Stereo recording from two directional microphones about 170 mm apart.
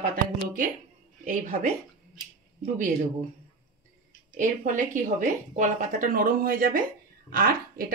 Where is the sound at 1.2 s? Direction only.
50° right (ahead or behind).